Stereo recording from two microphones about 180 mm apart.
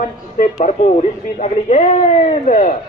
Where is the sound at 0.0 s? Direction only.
50° left (ahead or behind).